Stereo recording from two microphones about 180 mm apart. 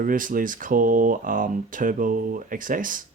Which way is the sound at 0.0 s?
50° right (ahead or behind).